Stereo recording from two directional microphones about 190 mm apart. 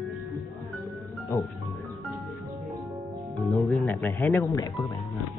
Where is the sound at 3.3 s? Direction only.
5° left (ahead or behind).